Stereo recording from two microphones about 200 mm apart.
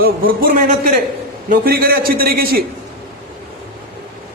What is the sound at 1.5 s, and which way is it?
A man's voice, 50° right (ahead or behind).